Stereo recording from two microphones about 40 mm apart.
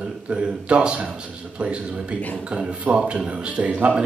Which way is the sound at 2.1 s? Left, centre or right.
Left.